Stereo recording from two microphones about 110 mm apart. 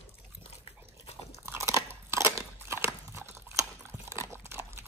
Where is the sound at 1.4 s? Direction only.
25° right (ahead or behind).